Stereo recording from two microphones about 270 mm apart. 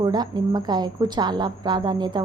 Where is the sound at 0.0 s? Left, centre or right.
Centre.